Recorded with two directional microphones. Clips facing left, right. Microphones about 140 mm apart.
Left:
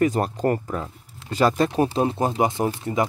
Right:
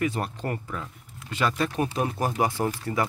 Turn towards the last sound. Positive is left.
turn(degrees=20)  # may be behind; listen again after turning